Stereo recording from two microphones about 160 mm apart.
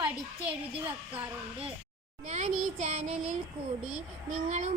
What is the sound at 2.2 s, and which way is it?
Speech, 45° right (ahead or behind).